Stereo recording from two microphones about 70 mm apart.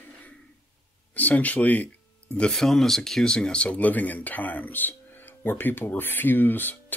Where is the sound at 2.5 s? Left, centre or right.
Centre.